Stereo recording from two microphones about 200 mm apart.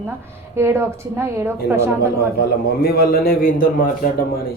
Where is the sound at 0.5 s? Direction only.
10° right (ahead or behind).